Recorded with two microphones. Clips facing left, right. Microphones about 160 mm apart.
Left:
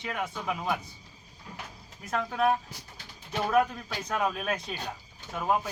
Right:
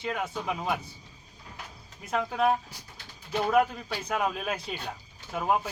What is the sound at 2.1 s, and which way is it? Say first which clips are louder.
Speech: right 1 dB; 5° right (ahead or behind).